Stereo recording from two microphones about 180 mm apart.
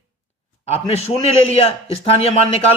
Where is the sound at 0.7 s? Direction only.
35° left (ahead or behind).